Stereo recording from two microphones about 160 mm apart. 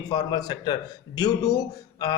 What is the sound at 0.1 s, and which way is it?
A man's voice, 25° left (ahead or behind).